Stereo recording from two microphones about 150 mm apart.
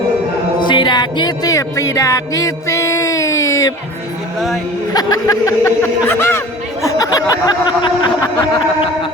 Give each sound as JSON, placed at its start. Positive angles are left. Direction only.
{"t": 0.6, "sound": "music", "side_deg": 30}
{"t": 4.4, "sound": "speech", "side_deg": 0}
{"t": 4.9, "sound": "speech", "side_deg": 25}